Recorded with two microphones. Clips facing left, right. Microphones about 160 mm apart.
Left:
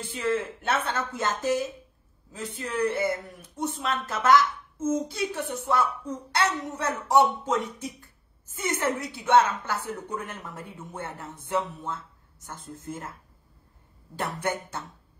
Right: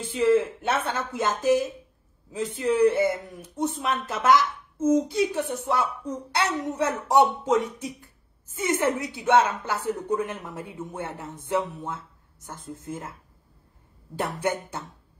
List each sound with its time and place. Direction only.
0.0 s speech: 15° right (ahead or behind)
14.1 s speech: 15° right (ahead or behind)